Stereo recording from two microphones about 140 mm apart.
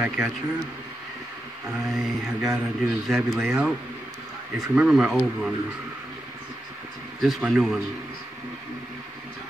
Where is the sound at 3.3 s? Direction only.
15° right (ahead or behind).